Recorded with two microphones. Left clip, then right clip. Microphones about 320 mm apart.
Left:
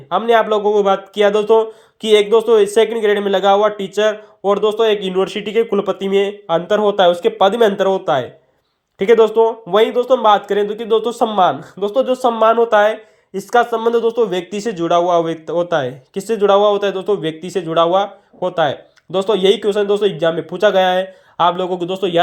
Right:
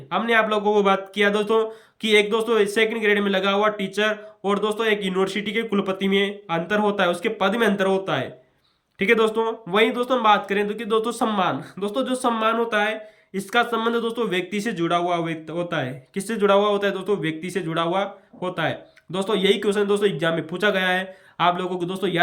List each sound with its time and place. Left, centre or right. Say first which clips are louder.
0.1 s speech: left 7 dB; centre